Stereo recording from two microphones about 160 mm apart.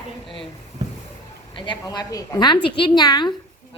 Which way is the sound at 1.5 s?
30° left (ahead or behind).